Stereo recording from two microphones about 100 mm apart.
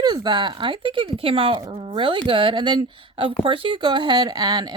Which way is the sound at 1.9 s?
55° right (ahead or behind).